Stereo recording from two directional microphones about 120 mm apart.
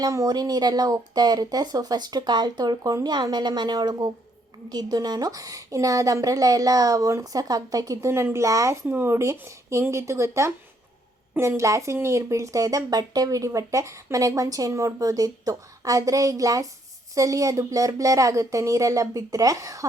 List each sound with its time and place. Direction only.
0.0 s a woman's voice: 30° right (ahead or behind)